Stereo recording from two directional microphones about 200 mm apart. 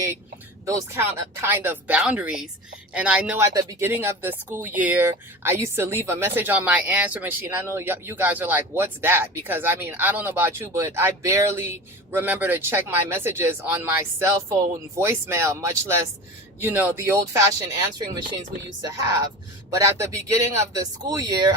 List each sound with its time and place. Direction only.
0.6 s speech: 15° right (ahead or behind)
3.5 s speech: 20° right (ahead or behind)